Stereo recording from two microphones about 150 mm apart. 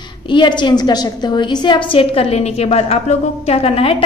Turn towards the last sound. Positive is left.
turn(degrees=40)  # may be behind; listen again after turning